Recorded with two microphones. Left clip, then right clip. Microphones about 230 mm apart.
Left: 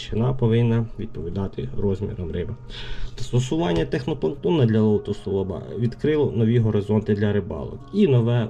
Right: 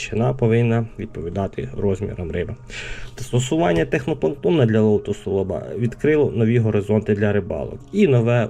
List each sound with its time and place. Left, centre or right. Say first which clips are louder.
0.0 s speech: right 4 dB; centre
3.5 s speech: right 5 dB; centre